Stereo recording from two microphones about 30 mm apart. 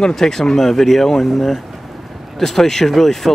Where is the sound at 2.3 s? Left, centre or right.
Centre.